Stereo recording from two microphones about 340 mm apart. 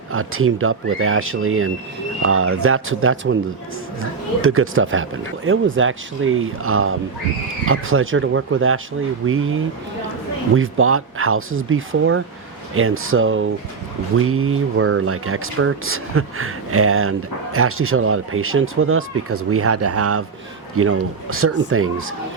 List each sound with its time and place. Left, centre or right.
0.1 s speech: right
4.4 s speech: right